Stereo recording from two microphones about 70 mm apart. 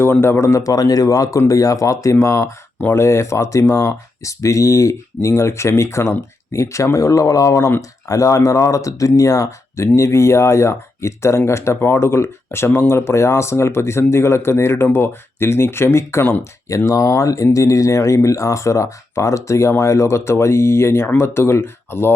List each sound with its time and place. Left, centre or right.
0.0 s speech: left
16.6 s speech: left